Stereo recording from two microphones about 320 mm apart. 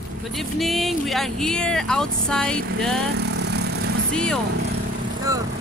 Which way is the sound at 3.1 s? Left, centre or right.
Right.